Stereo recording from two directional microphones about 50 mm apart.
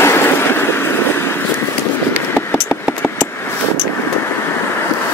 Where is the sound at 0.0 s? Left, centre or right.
Left.